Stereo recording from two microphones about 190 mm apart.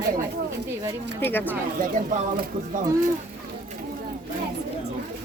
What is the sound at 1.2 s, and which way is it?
Speech, 10° left (ahead or behind).